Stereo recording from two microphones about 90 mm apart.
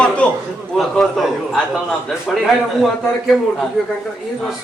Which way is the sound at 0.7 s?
Centre (ahead or behind).